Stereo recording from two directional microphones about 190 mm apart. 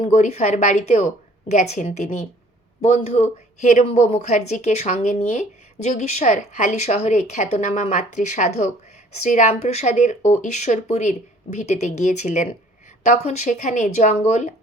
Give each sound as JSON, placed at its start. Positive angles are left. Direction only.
{"t": 0.0, "sound": "speech", "side_deg": 40}